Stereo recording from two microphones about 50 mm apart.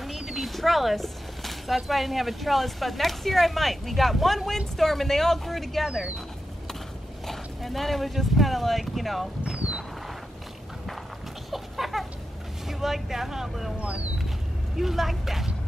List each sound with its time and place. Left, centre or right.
0.0 s a sound: centre
1.9 s speech: centre
7.2 s speech: centre
11.5 s a sound: centre
12.6 s speech: centre
13.7 s speech: right
14.8 s speech: centre